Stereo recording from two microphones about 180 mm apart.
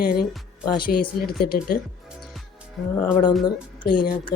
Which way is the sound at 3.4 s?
25° left (ahead or behind).